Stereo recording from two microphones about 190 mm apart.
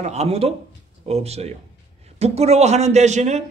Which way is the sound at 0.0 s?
35° right (ahead or behind).